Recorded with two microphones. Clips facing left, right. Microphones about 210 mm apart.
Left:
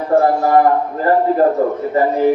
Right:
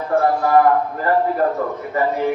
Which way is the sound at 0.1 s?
25° left (ahead or behind).